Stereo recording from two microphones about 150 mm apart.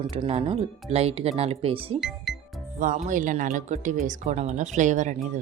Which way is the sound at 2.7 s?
60° right (ahead or behind).